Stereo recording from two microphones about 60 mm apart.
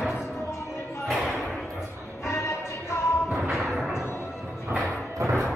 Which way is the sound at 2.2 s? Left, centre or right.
Left.